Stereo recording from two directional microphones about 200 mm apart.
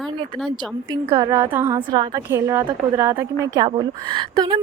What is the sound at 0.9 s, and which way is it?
Speech, 20° right (ahead or behind).